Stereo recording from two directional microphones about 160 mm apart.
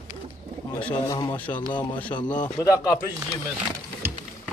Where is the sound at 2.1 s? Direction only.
25° left (ahead or behind).